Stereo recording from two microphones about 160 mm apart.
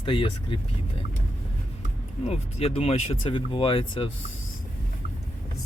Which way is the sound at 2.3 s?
40° left (ahead or behind).